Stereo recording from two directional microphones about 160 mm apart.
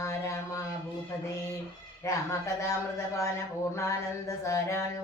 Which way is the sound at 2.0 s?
20° left (ahead or behind).